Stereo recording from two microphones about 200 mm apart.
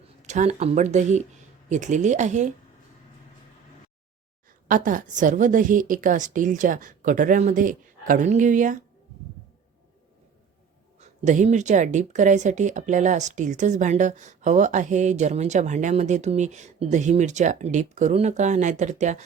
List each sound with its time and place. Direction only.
0.2 s speech: 35° right (ahead or behind)
4.7 s speech: 40° right (ahead or behind)
11.0 s speech: 35° right (ahead or behind)